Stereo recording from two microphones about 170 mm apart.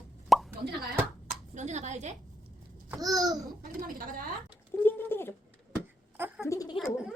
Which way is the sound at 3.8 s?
55° right (ahead or behind).